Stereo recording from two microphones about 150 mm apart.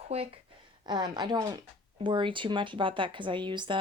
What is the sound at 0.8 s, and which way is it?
Speech, 30° right (ahead or behind).